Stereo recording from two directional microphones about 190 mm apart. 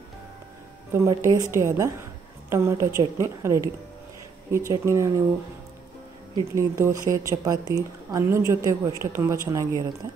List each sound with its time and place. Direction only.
0.9 s a woman's voice: 20° right (ahead or behind)
6.3 s a woman's voice: 15° right (ahead or behind)